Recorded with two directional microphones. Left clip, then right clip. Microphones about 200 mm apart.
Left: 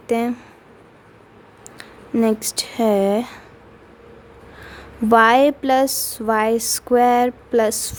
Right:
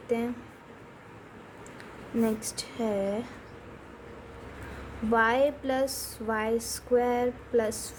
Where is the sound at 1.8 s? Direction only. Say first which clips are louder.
Left 10 dB; 50° left (ahead or behind).